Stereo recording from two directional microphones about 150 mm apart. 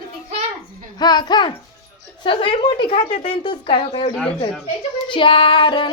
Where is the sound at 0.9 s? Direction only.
30° left (ahead or behind).